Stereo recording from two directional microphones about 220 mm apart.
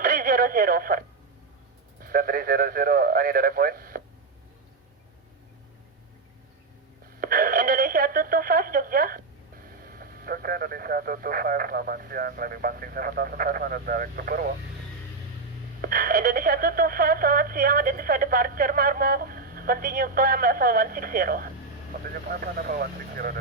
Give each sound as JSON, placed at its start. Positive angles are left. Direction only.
{"t": 0.0, "sound": "radio", "side_deg": -40}
{"t": 2.0, "sound": "speech", "side_deg": -40}
{"t": 7.2, "sound": "speech", "side_deg": -40}
{"t": 15.8, "sound": "speech", "side_deg": -40}